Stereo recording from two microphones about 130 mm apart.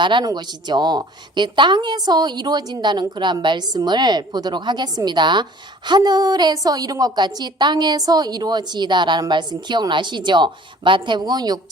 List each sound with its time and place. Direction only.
0.0 s a woman's voice: 35° right (ahead or behind)